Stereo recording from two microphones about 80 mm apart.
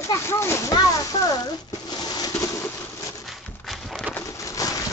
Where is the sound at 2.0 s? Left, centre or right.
Left.